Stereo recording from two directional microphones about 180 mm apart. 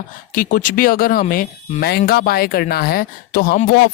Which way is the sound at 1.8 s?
60° left (ahead or behind).